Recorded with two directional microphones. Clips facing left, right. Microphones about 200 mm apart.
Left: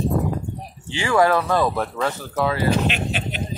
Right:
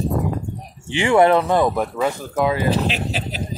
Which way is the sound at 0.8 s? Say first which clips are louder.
Right 4 dB; 25° right (ahead or behind).